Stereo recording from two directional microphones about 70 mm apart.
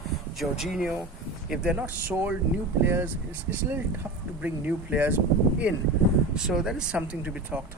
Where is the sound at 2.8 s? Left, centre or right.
Right.